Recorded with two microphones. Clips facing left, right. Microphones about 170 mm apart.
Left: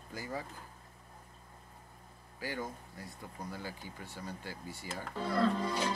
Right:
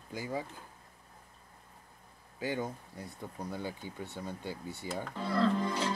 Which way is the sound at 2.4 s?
20° right (ahead or behind).